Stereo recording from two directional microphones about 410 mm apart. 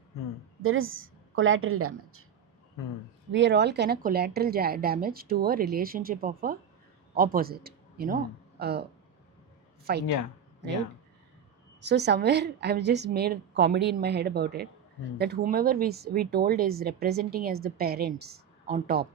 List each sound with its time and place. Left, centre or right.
0.6 s a woman's voice: right
3.3 s speech: right
9.9 s speech: right
11.8 s speech: right